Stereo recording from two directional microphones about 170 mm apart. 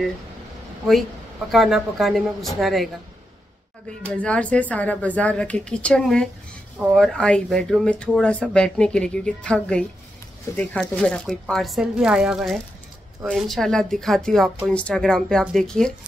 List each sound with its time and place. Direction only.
1.5 s speech: centre (ahead or behind)
4.2 s a woman's voice: 5° left (ahead or behind)